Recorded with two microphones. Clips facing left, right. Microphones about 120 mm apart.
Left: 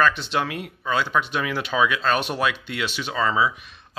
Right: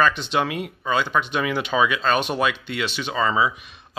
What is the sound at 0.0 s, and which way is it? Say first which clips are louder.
Speech: right 1 dB; centre (ahead or behind).